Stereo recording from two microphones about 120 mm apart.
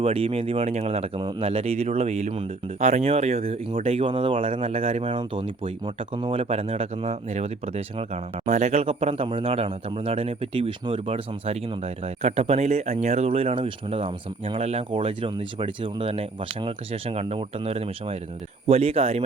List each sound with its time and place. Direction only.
0.0 s speech: 50° right (ahead or behind)